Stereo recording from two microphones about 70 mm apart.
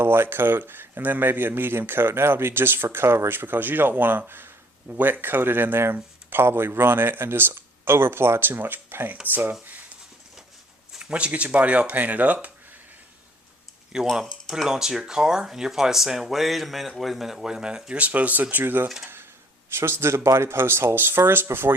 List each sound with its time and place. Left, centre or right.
0.0 s speech: right
10.9 s speech: centre
13.9 s speech: centre; by 18.9 s right
19.0 s a sound: right
19.7 s speech: right